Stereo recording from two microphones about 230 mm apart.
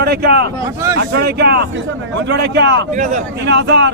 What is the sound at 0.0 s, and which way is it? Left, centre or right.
A man's voice, right.